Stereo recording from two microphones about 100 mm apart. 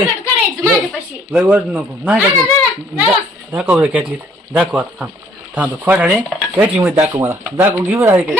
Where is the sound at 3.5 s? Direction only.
10° right (ahead or behind).